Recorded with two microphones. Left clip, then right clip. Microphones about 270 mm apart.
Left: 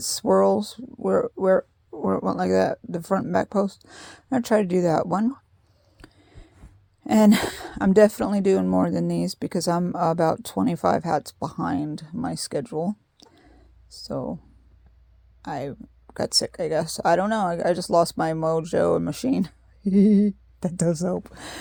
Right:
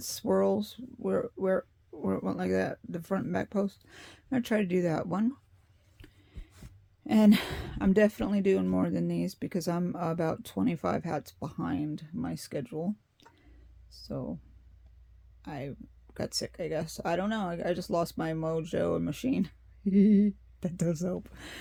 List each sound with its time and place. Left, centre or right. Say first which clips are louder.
0.0 s speech: left 9 dB; left
6.0 s a sound: left 7 dB; left
7.0 s speech: left 7 dB; left
15.4 s speech: left 10 dB; left